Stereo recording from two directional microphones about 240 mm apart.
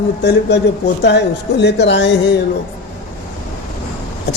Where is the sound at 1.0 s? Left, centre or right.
Left.